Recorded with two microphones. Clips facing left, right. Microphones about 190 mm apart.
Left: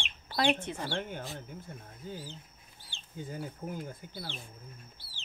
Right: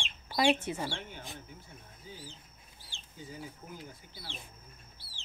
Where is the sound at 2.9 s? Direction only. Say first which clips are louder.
Left 5 dB; 55° left (ahead or behind).